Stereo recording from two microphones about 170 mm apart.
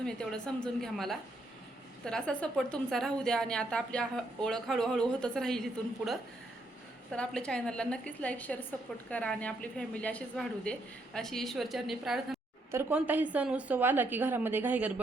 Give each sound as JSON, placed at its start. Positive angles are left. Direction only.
{"t": 0.0, "sound": "a woman's voice", "side_deg": 5}
{"t": 7.1, "sound": "a woman's voice", "side_deg": 5}